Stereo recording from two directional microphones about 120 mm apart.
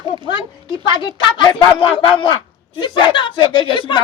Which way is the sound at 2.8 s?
40° left (ahead or behind).